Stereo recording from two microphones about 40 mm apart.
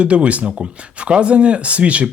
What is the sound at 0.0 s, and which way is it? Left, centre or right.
Speech, right.